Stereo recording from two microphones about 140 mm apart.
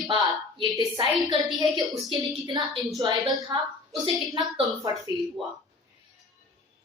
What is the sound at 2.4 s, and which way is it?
A woman's voice, 30° right (ahead or behind).